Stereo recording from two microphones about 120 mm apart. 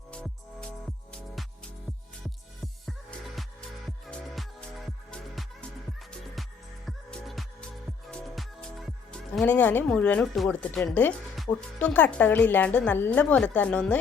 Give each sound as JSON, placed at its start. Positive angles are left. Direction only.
{"t": 0.1, "sound": "music", "side_deg": 10}
{"t": 2.8, "sound": "music", "side_deg": 0}
{"t": 9.8, "sound": "speech", "side_deg": 10}